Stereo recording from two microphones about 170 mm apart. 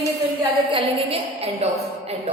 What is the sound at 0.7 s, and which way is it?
Speech, 35° right (ahead or behind).